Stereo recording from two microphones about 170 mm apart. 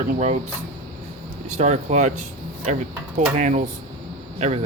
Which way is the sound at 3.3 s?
45° right (ahead or behind).